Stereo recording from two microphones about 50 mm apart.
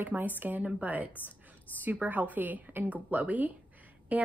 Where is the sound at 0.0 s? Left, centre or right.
Right.